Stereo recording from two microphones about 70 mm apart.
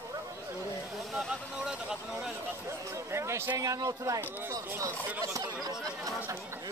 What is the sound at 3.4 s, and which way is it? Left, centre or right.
Speech, right.